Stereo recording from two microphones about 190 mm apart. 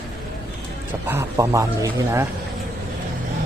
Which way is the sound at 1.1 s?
15° right (ahead or behind).